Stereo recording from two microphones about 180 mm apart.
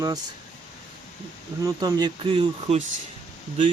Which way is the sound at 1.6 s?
25° right (ahead or behind).